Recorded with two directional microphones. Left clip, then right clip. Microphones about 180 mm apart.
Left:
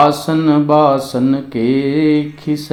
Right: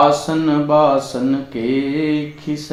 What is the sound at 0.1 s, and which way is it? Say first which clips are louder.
Speech: left 2 dB; 35° left (ahead or behind).